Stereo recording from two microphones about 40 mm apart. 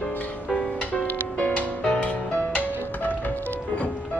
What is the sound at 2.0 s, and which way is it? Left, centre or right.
Music, left.